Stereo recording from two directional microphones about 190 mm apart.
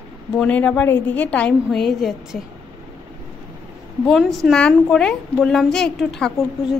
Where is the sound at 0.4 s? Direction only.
5° left (ahead or behind).